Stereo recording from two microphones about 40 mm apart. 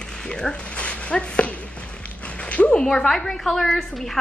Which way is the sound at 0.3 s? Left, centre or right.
Left.